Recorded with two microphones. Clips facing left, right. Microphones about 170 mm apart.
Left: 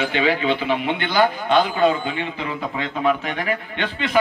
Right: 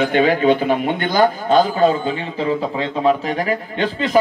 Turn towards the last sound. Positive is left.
turn(degrees=-35)  # may be behind; listen again after turning